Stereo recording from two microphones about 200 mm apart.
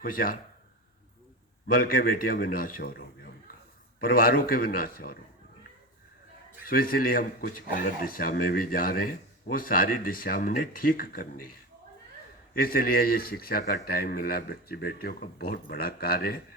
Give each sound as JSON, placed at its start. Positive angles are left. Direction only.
{"t": 0.0, "sound": "speech", "side_deg": 45}
{"t": 1.6, "sound": "speech", "side_deg": 45}
{"t": 4.0, "sound": "speech", "side_deg": 45}
{"t": 6.7, "sound": "speech", "side_deg": 45}
{"t": 12.5, "sound": "speech", "side_deg": 45}